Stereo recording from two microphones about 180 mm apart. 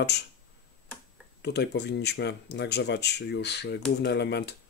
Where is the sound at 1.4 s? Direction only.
70° left (ahead or behind).